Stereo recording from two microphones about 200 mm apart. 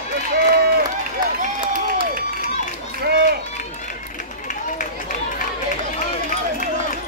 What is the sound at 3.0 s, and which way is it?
Run, 50° right (ahead or behind).